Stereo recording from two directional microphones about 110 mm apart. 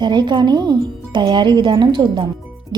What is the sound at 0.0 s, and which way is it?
A woman's voice, 40° right (ahead or behind).